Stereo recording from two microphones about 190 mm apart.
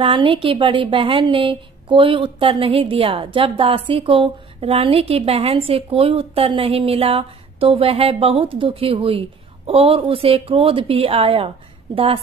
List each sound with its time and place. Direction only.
0.0 s a woman's voice: 25° right (ahead or behind)